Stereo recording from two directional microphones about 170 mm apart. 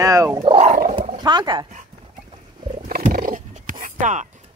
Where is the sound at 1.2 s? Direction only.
25° right (ahead or behind).